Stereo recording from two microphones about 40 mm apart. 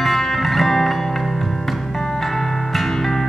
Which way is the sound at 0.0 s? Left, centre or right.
Centre.